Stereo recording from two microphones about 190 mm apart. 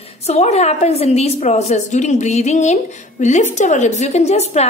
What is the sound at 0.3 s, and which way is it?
A woman's voice, 35° left (ahead or behind).